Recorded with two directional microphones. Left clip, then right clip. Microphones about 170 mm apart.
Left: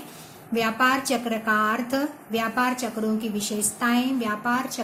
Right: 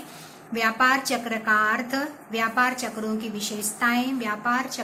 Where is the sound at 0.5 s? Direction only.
50° left (ahead or behind).